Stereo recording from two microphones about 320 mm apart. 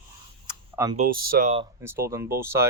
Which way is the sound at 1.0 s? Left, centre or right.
Right.